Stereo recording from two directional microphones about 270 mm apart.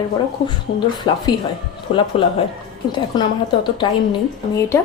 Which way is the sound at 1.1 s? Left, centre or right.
Centre.